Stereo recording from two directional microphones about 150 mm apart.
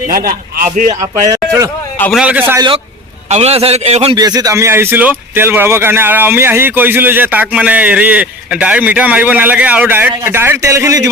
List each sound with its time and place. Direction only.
0.3 s a man's voice: 70° right (ahead or behind)
1.3 s a man's voice: 20° right (ahead or behind)
2.1 s a man's voice: 10° right (ahead or behind)
3.2 s a man's voice: 45° right (ahead or behind)
4.1 s a man's voice: 25° right (ahead or behind)